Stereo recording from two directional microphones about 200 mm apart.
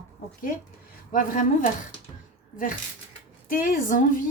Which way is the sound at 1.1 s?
40° left (ahead or behind).